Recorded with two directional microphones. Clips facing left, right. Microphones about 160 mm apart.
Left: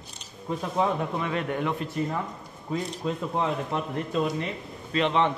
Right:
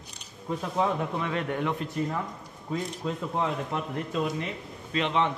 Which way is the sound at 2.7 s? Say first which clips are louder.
Left 2 dB; 25° left (ahead or behind).